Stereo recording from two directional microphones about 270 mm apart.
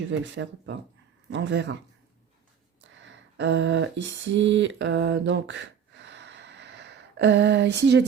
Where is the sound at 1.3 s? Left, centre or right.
Right.